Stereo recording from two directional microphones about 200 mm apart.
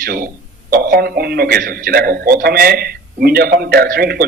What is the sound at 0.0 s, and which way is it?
A man's voice, 45° right (ahead or behind).